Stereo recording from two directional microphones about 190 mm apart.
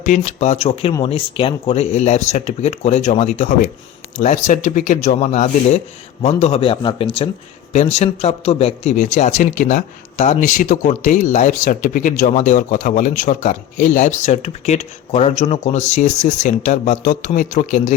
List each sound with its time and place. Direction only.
0.0 s a man's voice: 35° left (ahead or behind)